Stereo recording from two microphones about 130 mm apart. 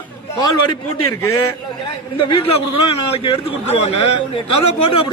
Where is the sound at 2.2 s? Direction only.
40° left (ahead or behind).